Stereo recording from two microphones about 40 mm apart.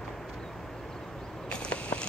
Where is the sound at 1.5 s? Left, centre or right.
Left.